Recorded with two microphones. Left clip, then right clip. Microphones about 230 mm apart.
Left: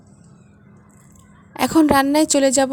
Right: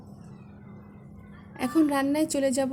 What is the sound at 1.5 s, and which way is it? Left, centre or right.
A woman's voice, left.